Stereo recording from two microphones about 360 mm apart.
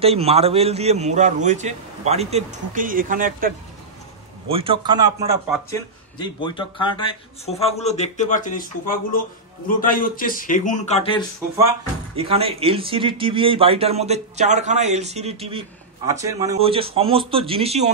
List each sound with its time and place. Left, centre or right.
0.0 s a man's voice: centre
5.5 s speech: centre
12.2 s a man's voice: centre